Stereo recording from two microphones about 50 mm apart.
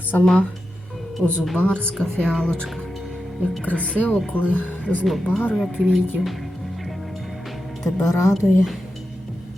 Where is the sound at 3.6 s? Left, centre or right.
Left.